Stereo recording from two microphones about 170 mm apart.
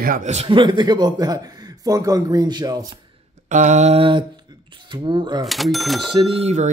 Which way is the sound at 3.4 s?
45° right (ahead or behind).